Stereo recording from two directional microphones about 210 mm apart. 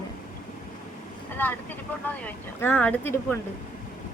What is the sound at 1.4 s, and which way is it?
Speech, 10° left (ahead or behind).